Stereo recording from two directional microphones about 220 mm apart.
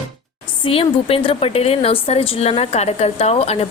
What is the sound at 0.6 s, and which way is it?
A woman's voice, 25° left (ahead or behind).